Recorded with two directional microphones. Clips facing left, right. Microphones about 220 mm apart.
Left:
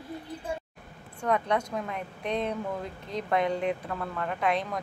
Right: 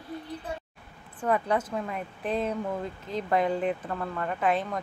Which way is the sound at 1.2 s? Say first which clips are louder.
Right 1 dB; 5° right (ahead or behind).